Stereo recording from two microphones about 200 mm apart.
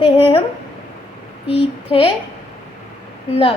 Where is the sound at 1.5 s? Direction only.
30° left (ahead or behind).